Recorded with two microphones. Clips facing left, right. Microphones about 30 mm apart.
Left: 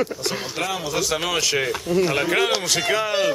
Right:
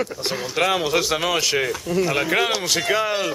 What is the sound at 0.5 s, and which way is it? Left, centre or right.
Speech, right.